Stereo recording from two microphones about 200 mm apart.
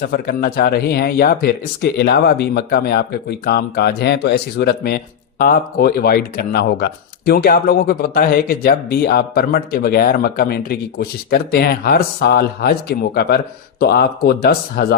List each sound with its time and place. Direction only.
0.1 s speech: 50° left (ahead or behind)